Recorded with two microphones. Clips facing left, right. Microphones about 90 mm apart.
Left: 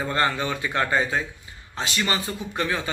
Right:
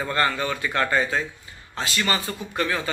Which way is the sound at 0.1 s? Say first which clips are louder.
Right 1 dB; 25° left (ahead or behind).